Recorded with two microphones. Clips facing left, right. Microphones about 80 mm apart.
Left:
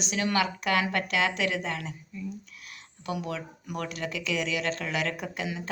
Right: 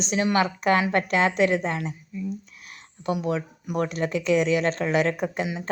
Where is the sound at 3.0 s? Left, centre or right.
Right.